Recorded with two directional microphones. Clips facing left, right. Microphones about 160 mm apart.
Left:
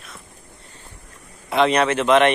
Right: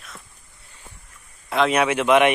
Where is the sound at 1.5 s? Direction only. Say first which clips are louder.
Left 2 dB; centre (ahead or behind).